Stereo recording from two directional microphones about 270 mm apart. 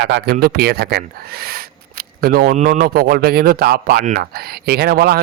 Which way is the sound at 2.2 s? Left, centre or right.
Right.